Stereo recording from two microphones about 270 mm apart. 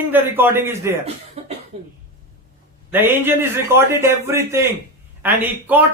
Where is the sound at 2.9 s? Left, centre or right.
Centre.